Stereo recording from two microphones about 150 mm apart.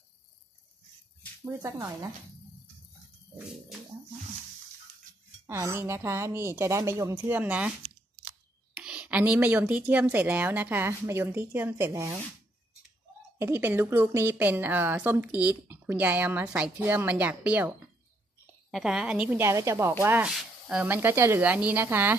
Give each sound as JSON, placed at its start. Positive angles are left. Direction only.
{"t": 1.4, "sound": "a woman's voice", "side_deg": -15}
{"t": 5.5, "sound": "a woman's voice", "side_deg": -15}
{"t": 8.8, "sound": "a woman's voice", "side_deg": -5}
{"t": 13.4, "sound": "a woman's voice", "side_deg": -15}